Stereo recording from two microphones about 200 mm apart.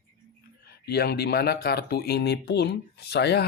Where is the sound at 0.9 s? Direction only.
55° left (ahead or behind).